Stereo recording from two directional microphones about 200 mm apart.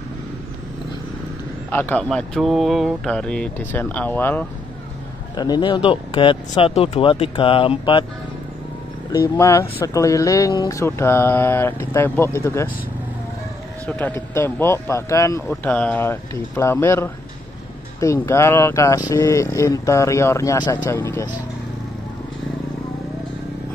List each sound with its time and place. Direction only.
1.7 s speech: 10° left (ahead or behind)
5.3 s speech: 20° left (ahead or behind)
9.1 s speech: 15° left (ahead or behind)
13.8 s speech: 10° left (ahead or behind)